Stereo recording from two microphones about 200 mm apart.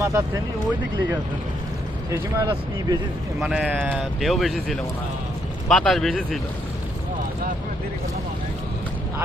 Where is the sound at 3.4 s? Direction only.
5° right (ahead or behind).